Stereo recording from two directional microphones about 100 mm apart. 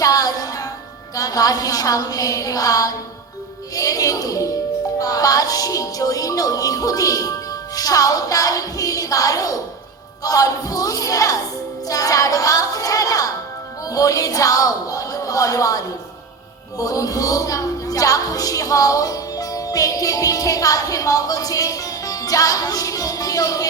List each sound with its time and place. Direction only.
0.0 s music: 35° left (ahead or behind)
1.1 s a woman's voice: 35° left (ahead or behind)
3.8 s music: 35° left (ahead or behind)
4.9 s a woman's voice: 35° left (ahead or behind)